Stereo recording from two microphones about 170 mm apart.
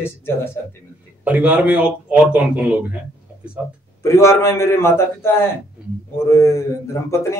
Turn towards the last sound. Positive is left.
turn(degrees=15)  # may be behind; listen again after turning